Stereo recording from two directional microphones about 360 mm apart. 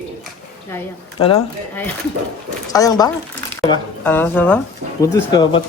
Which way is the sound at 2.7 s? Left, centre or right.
Centre.